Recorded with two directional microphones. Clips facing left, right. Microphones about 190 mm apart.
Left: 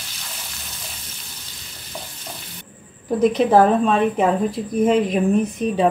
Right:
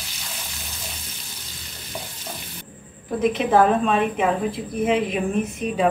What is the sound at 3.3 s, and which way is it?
A woman's voice, 35° left (ahead or behind).